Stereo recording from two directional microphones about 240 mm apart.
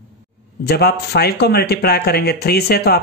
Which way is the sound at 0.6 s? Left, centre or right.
Left.